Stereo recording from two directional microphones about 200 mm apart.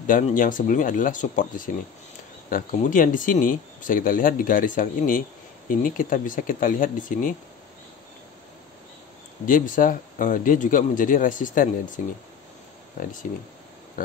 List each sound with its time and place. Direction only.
0.0 s speech: 40° left (ahead or behind)
2.5 s speech: 40° left (ahead or behind)
9.5 s speech: 40° left (ahead or behind)
13.0 s speech: 45° left (ahead or behind)